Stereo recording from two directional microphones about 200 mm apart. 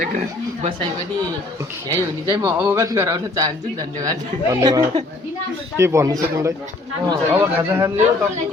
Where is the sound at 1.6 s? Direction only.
15° right (ahead or behind).